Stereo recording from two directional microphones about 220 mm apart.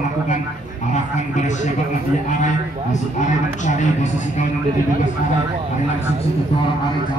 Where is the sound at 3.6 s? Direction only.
35° left (ahead or behind).